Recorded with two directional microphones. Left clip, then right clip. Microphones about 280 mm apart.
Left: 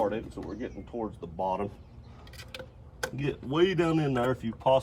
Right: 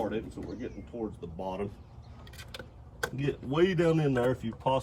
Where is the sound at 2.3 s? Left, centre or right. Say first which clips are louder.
Left 2 dB; centre.